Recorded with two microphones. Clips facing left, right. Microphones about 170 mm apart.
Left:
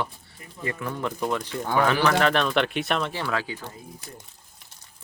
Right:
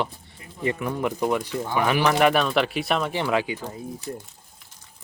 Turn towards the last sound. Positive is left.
turn(degrees=-20)  # may be behind; listen again after turning